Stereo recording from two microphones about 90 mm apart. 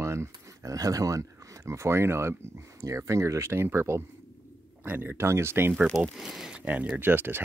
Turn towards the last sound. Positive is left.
turn(degrees=-25)  # may be behind; listen again after turning